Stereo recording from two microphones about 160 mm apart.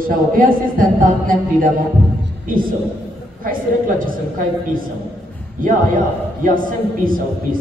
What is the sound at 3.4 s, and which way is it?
A man's voice, 60° right (ahead or behind).